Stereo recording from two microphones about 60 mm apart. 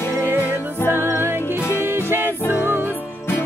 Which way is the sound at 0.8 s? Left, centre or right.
Left.